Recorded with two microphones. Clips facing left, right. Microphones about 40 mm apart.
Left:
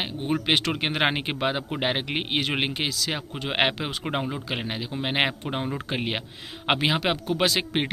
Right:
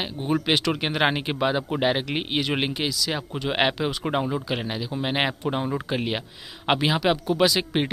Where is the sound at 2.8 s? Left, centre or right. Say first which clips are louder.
Right 2 dB; left.